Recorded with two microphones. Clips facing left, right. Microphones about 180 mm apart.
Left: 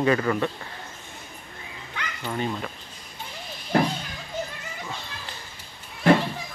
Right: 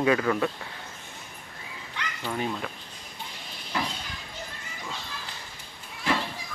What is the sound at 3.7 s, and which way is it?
Children playing, 55° left (ahead or behind).